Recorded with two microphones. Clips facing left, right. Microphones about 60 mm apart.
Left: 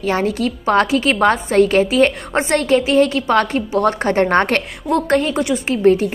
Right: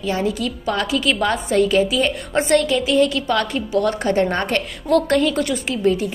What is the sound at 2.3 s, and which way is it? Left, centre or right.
A woman's voice, left.